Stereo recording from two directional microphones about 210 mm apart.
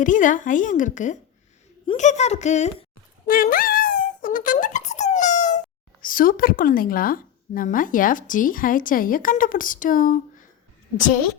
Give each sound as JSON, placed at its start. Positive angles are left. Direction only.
{"t": 0.0, "sound": "a woman's voice", "side_deg": 40}
{"t": 3.2, "sound": "wail", "side_deg": 40}
{"t": 6.0, "sound": "a woman's voice", "side_deg": 40}